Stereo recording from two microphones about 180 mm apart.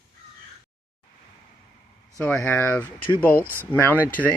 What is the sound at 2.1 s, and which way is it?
Speech, 15° left (ahead or behind).